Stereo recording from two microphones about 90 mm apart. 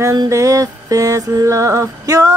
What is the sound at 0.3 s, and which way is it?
Music, 35° right (ahead or behind).